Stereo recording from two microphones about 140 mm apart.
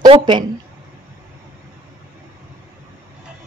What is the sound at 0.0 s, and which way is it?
Speech, 35° right (ahead or behind).